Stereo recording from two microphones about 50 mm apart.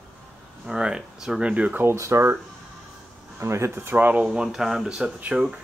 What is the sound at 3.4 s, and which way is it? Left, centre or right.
Speech, right.